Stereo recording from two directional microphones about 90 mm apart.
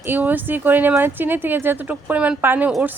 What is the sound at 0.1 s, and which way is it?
Speech, 20° right (ahead or behind).